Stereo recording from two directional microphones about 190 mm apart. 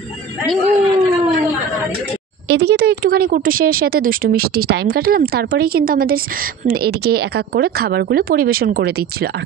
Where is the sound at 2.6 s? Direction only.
55° right (ahead or behind).